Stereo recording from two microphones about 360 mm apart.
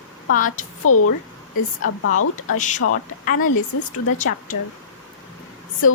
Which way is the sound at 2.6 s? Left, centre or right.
Left.